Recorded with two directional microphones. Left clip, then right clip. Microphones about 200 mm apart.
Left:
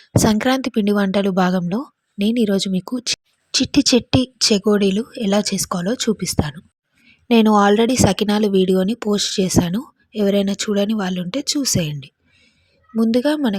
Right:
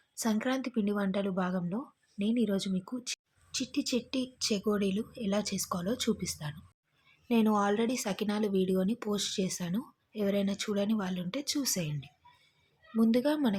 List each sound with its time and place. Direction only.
0.1 s a woman's voice: 45° left (ahead or behind)